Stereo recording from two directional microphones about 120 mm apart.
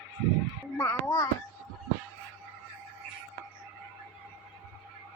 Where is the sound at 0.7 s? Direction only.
20° left (ahead or behind).